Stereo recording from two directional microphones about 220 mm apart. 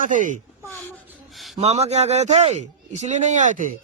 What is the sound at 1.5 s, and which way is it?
A man's voice, 30° right (ahead or behind).